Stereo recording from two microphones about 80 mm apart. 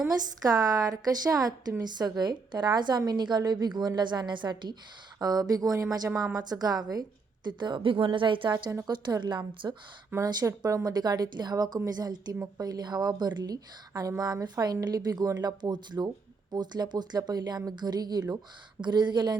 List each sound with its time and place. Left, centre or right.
0.5 s a woman's voice: right
1.8 s speech: right
5.2 s a woman's voice: right
6.3 s speech: right
7.4 s a woman's voice: right
8.9 s speech: right
9.6 s a woman's voice: right
10.9 s speech: right
18.8 s speech: right